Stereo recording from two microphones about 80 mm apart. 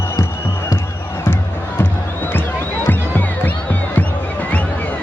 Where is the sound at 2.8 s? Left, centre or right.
Left.